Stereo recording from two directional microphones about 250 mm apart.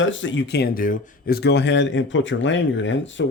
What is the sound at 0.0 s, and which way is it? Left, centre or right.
Speech, left.